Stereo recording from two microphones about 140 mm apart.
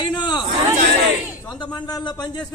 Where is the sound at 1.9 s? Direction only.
30° left (ahead or behind).